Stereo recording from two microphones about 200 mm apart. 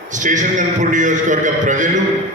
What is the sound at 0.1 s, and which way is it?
A man's voice, 40° right (ahead or behind).